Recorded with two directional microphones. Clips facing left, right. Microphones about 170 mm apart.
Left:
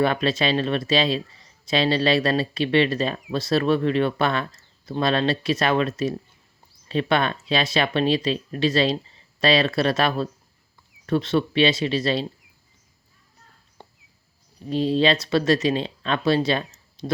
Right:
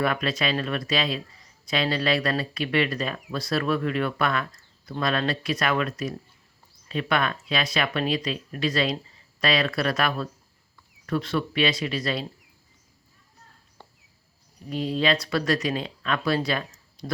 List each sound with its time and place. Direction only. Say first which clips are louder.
0.0 s speech: left 4 dB; 30° left (ahead or behind)
13.8 s cricket: left 3 dB; 20° left (ahead or behind)
14.7 s speech: left 4 dB; 25° left (ahead or behind)